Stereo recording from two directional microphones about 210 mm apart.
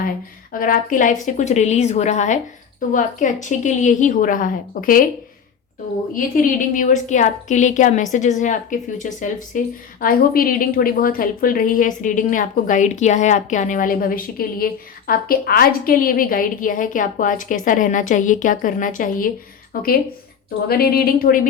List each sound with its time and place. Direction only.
0.6 s speech: 40° left (ahead or behind)
6.1 s speech: 40° left (ahead or behind)